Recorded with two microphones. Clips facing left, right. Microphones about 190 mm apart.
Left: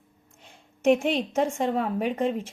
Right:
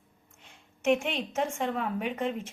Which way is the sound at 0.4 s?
35° left (ahead or behind).